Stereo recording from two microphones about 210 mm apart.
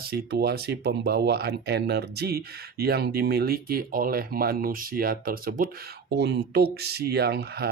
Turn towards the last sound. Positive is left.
turn(degrees=-50)  # may be behind; listen again after turning